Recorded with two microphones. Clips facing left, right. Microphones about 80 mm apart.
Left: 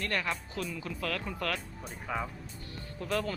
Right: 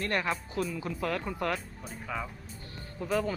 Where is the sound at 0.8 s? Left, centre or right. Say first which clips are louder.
Right 3 dB; right.